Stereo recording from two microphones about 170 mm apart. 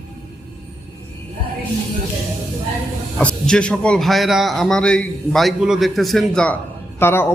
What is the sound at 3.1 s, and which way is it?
A man's voice, 5° left (ahead or behind).